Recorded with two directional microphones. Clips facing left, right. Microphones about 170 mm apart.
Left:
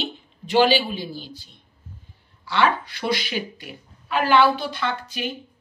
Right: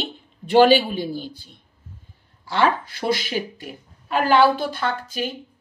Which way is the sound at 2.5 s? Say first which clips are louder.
Right 1 dB; 45° right (ahead or behind).